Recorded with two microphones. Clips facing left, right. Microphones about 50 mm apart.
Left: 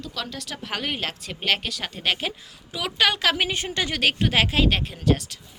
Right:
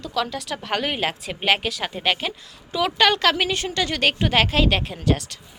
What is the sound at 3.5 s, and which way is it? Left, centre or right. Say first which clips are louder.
Speech: right 3 dB; centre.